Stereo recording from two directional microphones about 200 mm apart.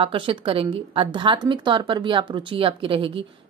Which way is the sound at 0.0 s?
25° right (ahead or behind).